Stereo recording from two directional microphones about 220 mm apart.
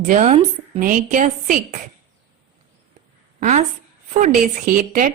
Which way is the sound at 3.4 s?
35° right (ahead or behind).